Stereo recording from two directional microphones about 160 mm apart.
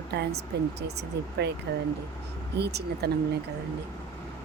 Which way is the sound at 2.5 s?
90° right.